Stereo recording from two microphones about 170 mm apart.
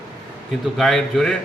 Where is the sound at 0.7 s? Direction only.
Centre (ahead or behind).